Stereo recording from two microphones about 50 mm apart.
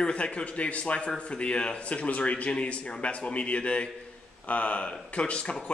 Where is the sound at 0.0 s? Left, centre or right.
Left.